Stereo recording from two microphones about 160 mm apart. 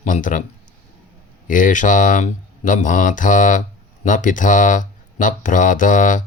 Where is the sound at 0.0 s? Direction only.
55° left (ahead or behind).